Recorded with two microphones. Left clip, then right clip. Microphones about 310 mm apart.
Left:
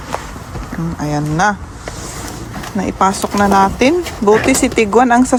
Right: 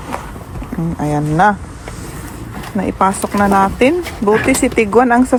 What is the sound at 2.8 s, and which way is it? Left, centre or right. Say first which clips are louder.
Speech: even; centre.